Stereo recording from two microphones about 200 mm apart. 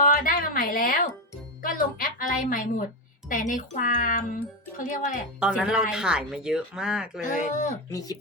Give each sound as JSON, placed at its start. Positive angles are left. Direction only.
{"t": 0.0, "sound": "a sound", "side_deg": 40}
{"t": 1.6, "sound": "a woman's voice", "side_deg": 45}
{"t": 5.4, "sound": "speech", "side_deg": -5}
{"t": 7.2, "sound": "speech", "side_deg": 40}
{"t": 7.9, "sound": "speech", "side_deg": 15}